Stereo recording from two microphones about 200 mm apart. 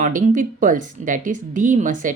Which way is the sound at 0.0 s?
40° right (ahead or behind).